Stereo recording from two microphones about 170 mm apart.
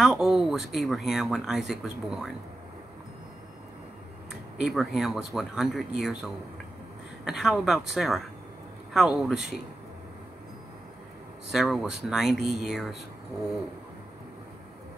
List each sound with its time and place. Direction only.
0.0 s speech: 5° right (ahead or behind)
4.6 s speech: centre (ahead or behind)
11.5 s speech: centre (ahead or behind)